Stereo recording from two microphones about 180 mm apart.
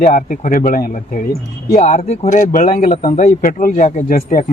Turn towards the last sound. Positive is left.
turn(degrees=45)  # may be behind; listen again after turning